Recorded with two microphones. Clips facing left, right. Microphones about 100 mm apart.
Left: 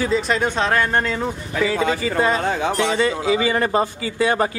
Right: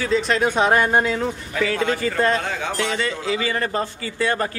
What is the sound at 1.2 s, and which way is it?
A man's voice, 5° left (ahead or behind).